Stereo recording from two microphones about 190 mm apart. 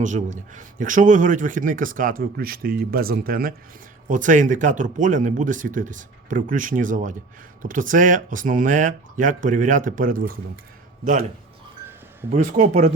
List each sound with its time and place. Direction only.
0.0 s a man's voice: 40° right (ahead or behind)
12.3 s speech: 40° right (ahead or behind)